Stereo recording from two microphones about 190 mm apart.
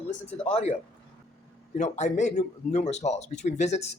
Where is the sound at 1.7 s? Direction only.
40° left (ahead or behind).